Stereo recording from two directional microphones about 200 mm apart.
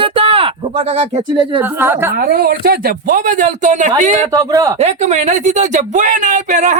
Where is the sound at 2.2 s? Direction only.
50° right (ahead or behind).